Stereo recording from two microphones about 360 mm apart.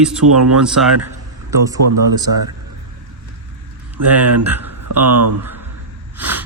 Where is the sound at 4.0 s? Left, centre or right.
Right.